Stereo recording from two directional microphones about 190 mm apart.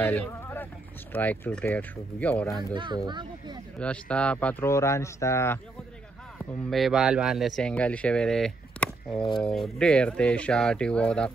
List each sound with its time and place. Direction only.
0.0 s speech: 10° left (ahead or behind)
2.7 s speech: 25° right (ahead or behind)
3.8 s speech: 5° left (ahead or behind)
6.3 s speech: centre (ahead or behind)